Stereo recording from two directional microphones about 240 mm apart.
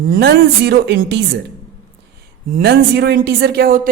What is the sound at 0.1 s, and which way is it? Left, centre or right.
A woman's voice, right.